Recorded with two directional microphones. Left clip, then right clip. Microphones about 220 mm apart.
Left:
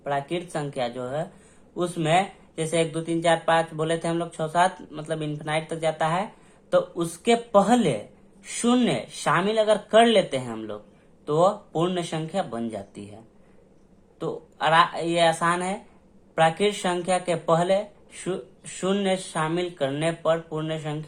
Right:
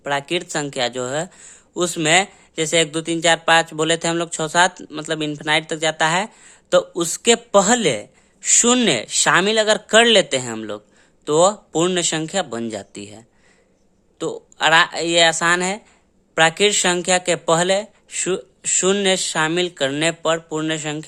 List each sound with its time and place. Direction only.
0.0 s speech: 40° right (ahead or behind)
14.2 s speech: 45° right (ahead or behind)